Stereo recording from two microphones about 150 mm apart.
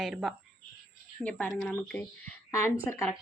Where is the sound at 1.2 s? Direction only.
10° left (ahead or behind).